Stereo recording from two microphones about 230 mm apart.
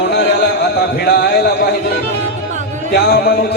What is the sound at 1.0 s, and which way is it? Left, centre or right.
Speech, left.